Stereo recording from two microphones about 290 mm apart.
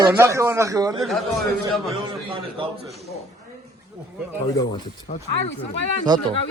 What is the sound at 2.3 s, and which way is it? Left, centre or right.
Speech, centre.